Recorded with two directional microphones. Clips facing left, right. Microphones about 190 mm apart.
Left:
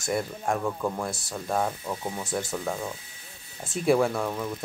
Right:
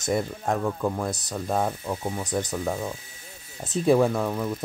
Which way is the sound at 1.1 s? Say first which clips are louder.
Right 4 dB; 20° right (ahead or behind).